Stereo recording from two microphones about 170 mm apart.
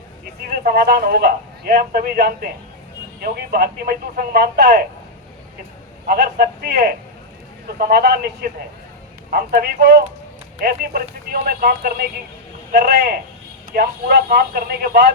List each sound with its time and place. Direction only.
0.4 s a man's voice: 65° right (ahead or behind)
6.1 s a man's voice: 60° right (ahead or behind)